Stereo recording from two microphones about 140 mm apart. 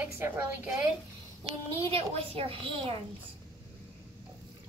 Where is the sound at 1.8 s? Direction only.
40° right (ahead or behind).